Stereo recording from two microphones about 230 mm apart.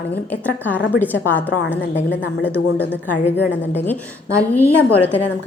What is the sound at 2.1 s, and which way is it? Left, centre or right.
Speech, left.